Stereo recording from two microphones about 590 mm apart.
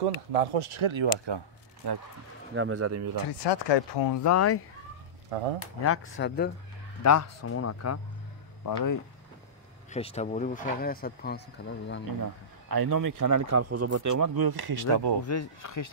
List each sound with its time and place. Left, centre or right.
0.0 s a man's voice: right
2.5 s speech: centre
3.3 s speech: left
5.3 s speech: right
5.8 s speech: left
9.8 s speech: centre
12.6 s a man's voice: right
15.2 s speech: left